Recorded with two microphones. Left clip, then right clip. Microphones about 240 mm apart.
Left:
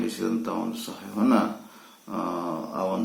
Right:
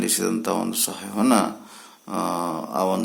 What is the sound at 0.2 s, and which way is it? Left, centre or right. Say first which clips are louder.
Speech: right 5 dB; right.